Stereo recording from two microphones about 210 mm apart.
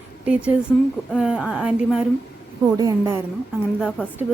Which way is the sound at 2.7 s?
15° right (ahead or behind).